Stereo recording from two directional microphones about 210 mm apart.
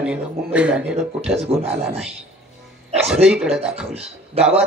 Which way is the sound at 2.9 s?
Centre (ahead or behind).